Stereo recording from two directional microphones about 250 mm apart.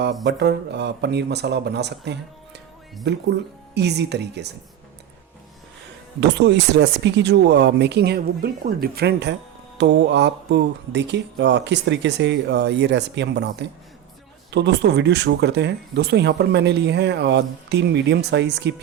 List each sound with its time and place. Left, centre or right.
0.3 s speech: right
6.1 s speech: right